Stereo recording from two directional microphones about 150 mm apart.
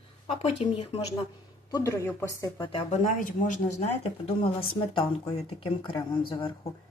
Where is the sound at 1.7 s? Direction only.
20° left (ahead or behind).